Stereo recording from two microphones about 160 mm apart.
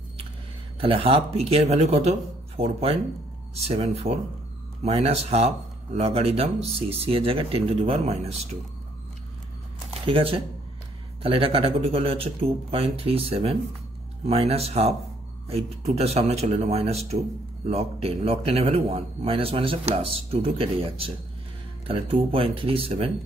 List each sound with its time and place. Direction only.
0.7 s a man's voice: 35° right (ahead or behind)
10.0 s a man's voice: 35° right (ahead or behind)